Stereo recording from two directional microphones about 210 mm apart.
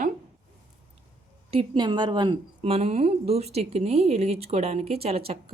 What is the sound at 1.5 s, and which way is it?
Speech, 25° right (ahead or behind).